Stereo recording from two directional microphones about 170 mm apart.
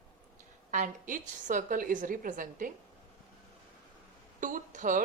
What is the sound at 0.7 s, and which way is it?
A woman's voice, 50° right (ahead or behind).